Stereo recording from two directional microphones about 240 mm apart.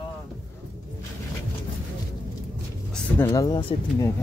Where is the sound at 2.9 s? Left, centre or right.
Centre.